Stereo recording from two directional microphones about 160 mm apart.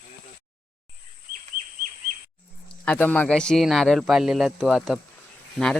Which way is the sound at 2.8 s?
10° left (ahead or behind).